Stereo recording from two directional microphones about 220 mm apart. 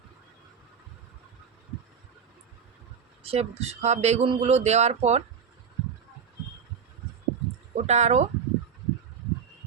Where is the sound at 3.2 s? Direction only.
25° right (ahead or behind).